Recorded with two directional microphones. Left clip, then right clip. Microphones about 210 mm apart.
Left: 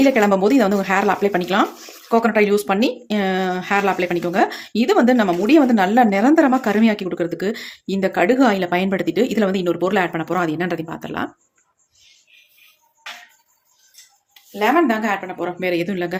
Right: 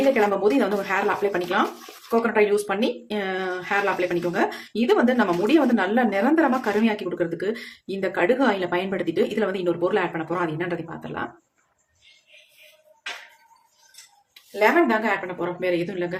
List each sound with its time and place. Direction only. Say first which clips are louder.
0.1 s speech: left 4 dB; 45° left (ahead or behind)
14.6 s speech: left 2 dB; 35° left (ahead or behind)